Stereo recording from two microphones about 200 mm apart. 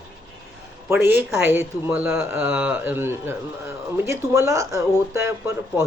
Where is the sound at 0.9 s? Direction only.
10° right (ahead or behind).